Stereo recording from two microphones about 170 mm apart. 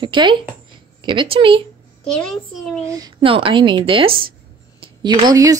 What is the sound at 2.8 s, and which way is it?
Speech, 20° right (ahead or behind).